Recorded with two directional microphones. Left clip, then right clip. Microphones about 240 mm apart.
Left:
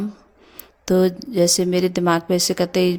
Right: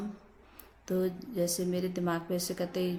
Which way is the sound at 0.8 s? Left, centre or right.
Left.